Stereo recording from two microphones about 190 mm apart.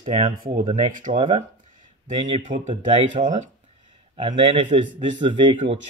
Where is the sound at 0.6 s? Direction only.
35° right (ahead or behind).